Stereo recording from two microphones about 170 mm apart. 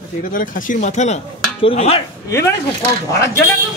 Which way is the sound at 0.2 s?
55° left (ahead or behind).